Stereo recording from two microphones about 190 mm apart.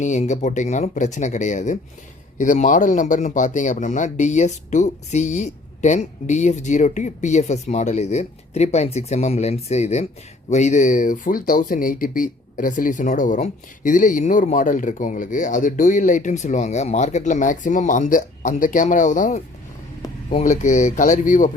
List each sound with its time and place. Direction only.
0.0 s speech: 40° left (ahead or behind)